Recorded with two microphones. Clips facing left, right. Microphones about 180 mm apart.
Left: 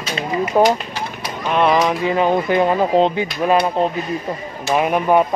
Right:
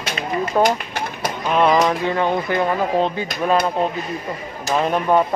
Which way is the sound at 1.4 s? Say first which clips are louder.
Even; centre (ahead or behind).